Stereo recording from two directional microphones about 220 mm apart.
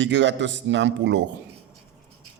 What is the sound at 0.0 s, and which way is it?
A man's voice, 55° right (ahead or behind).